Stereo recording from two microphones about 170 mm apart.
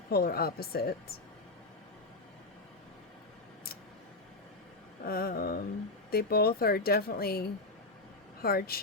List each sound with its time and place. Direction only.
0.1 s speech: 65° left (ahead or behind)
5.0 s speech: 60° left (ahead or behind)